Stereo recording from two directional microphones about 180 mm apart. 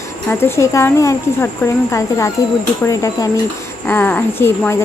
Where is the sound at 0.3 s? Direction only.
15° left (ahead or behind).